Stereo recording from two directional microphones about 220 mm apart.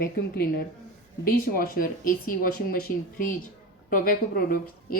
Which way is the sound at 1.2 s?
40° left (ahead or behind).